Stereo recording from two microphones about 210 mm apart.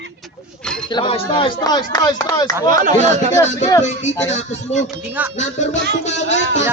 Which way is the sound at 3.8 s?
35° left (ahead or behind).